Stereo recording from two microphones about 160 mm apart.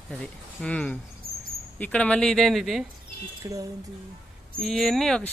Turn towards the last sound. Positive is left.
turn(degrees=5)  # may be behind; listen again after turning